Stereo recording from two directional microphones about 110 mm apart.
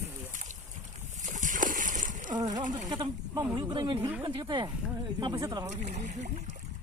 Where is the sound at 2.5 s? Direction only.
40° right (ahead or behind).